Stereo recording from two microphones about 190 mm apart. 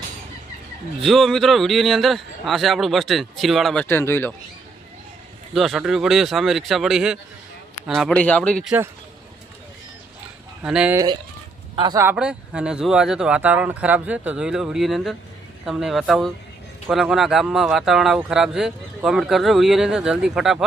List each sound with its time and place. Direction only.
1.0 s speech: centre (ahead or behind)
3.8 s speech: 10° left (ahead or behind)
5.5 s speech: centre (ahead or behind)
10.6 s speech: 5° right (ahead or behind)
10.9 s speech: 20° right (ahead or behind)
12.0 s speech: 5° right (ahead or behind)